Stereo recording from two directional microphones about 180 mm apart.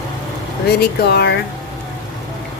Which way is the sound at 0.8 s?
65° left (ahead or behind).